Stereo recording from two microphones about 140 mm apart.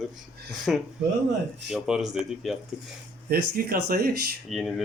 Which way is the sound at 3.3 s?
90° right.